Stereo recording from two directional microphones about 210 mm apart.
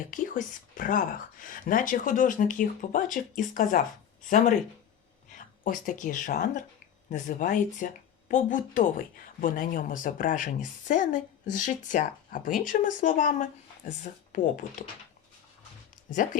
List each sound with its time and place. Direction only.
0.0 s speech: 40° left (ahead or behind)
5.3 s speech: 40° left (ahead or behind)
16.0 s speech: 40° left (ahead or behind)